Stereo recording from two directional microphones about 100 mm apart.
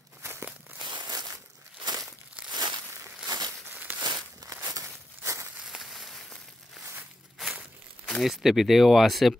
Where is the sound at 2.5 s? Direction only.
45° right (ahead or behind).